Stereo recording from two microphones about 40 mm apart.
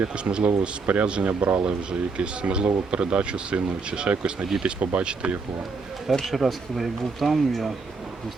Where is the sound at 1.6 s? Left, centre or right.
Right.